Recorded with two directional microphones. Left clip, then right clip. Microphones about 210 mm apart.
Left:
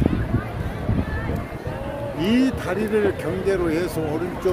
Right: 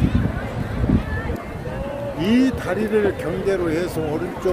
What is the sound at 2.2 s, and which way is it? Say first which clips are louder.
Speech: right 2 dB; centre (ahead or behind).